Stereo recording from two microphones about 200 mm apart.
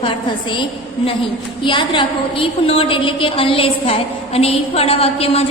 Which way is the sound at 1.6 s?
25° left (ahead or behind).